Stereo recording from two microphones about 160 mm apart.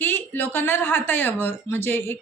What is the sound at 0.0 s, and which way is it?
A woman's voice, 15° left (ahead or behind).